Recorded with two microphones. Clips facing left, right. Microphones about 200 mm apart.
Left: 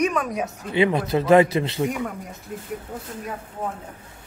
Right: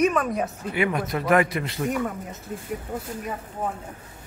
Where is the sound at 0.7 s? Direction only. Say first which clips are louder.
Left 5 dB; 25° left (ahead or behind).